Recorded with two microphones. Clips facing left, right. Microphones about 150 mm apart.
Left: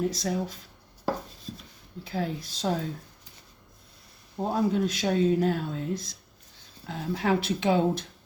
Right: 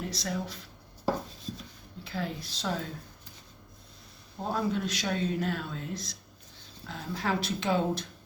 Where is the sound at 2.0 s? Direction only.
50° left (ahead or behind).